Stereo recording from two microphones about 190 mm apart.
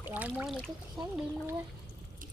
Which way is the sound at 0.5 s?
5° left (ahead or behind).